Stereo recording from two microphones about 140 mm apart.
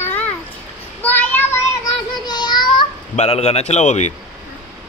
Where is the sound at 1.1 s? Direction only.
10° left (ahead or behind).